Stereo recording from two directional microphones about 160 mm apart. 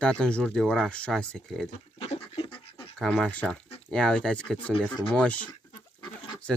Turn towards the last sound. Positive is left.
turn(degrees=25)  # may be behind; listen again after turning